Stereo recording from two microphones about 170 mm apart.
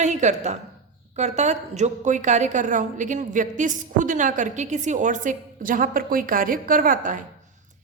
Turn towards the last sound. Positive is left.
turn(degrees=-50)  # may be behind; listen again after turning